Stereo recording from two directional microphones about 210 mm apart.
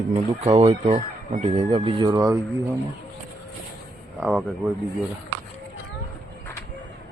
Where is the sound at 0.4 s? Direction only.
25° right (ahead or behind).